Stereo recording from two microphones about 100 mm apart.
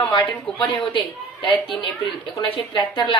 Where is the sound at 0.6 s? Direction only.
60° left (ahead or behind).